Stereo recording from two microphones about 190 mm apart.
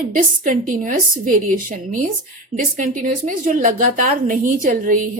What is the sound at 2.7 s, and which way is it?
A woman's voice, 45° right (ahead or behind).